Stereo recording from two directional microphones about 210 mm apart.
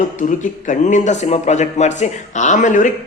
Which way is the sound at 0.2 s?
35° left (ahead or behind).